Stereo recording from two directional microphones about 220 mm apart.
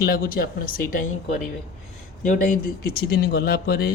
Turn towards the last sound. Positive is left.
turn(degrees=45)  # may be behind; listen again after turning